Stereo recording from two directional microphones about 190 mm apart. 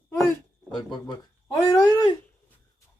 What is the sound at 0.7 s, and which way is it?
Speech, 25° left (ahead or behind).